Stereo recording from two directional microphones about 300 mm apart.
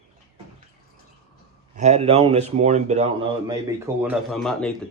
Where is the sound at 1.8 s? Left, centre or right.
Right.